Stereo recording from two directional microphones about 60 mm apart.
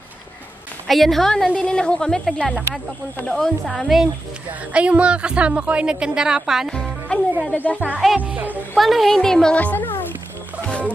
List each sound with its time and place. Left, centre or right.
0.8 s a woman's voice: centre
1.5 s a woman's voice: centre
4.5 s a woman's voice: right
6.7 s music: centre
7.5 s a child's voice: left
8.2 s speech: right
8.7 s a woman's voice: centre
9.6 s a child's voice: left
9.8 s a sound: left
10.6 s music: centre